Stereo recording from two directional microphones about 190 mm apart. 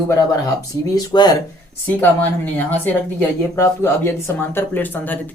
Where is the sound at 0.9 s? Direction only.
20° left (ahead or behind).